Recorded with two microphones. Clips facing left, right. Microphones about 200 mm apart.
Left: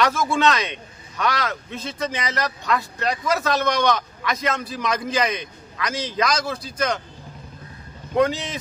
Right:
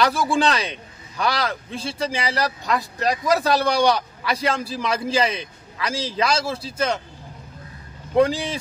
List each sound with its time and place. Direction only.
0.0 s a man's voice: 35° right (ahead or behind)
8.2 s a man's voice: 30° right (ahead or behind)